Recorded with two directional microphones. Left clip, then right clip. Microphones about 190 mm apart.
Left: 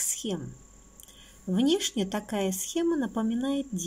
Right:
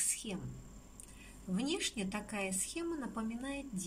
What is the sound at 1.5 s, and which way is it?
A woman's voice, 45° left (ahead or behind).